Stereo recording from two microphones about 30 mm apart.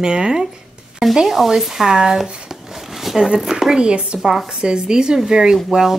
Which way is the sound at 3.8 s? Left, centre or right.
Right.